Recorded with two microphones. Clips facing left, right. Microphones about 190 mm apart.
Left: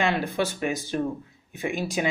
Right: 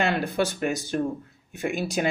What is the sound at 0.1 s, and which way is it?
Speech, 45° right (ahead or behind).